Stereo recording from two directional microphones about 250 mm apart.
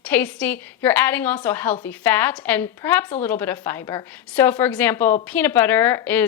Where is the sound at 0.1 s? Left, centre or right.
Centre.